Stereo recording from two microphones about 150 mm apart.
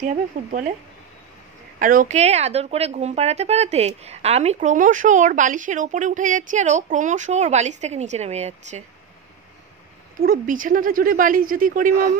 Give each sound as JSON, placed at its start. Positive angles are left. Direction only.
{"t": 0.0, "sound": "speech", "side_deg": -55}
{"t": 1.8, "sound": "speech", "side_deg": -65}
{"t": 10.2, "sound": "speech", "side_deg": -70}